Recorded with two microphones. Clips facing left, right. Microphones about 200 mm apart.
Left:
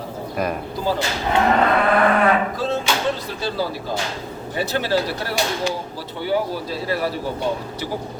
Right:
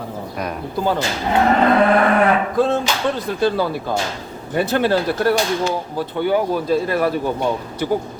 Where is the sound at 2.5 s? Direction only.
55° right (ahead or behind).